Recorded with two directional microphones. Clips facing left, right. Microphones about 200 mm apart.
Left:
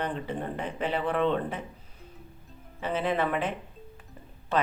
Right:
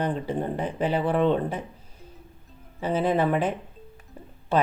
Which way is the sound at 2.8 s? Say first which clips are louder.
Right 5 dB; 40° right (ahead or behind).